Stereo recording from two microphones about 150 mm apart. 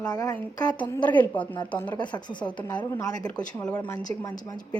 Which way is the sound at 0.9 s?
10° left (ahead or behind).